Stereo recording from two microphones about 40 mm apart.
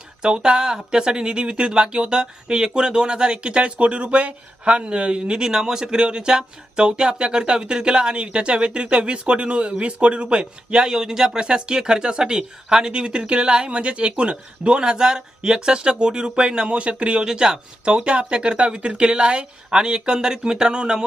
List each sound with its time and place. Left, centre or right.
0.2 s speech: right